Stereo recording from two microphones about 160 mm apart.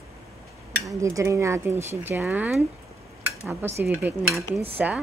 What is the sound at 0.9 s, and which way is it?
Speech, 20° right (ahead or behind).